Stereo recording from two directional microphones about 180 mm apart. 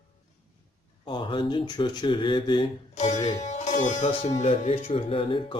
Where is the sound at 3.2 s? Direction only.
40° left (ahead or behind).